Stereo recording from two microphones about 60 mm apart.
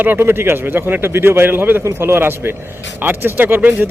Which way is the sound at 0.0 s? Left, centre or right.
Right.